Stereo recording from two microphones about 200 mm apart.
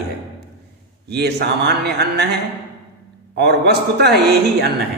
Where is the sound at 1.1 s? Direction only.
55° right (ahead or behind).